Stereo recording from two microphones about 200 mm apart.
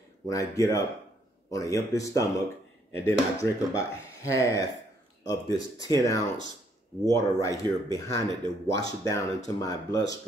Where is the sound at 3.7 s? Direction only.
15° left (ahead or behind).